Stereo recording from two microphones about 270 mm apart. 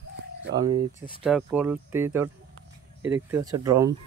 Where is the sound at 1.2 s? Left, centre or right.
Centre.